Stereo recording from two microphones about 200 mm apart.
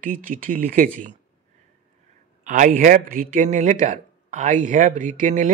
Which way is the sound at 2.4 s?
40° right (ahead or behind).